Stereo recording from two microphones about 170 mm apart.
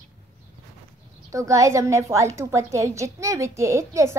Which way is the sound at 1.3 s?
20° right (ahead or behind).